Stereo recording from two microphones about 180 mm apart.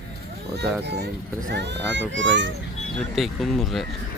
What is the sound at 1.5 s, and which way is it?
Speech, 75° right (ahead or behind).